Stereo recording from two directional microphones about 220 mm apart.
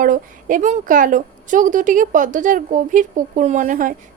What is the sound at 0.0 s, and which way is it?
Speech, 40° right (ahead or behind).